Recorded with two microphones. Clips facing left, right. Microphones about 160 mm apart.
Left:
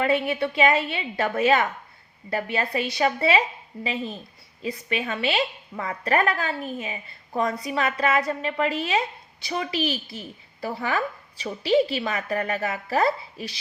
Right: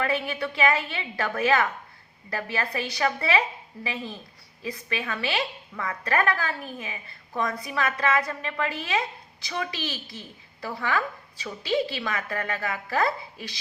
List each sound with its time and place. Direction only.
0.0 s a woman's voice: 25° left (ahead or behind)